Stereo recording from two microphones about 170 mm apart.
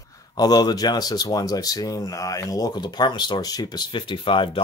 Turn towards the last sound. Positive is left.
turn(degrees=30)  # may be behind; listen again after turning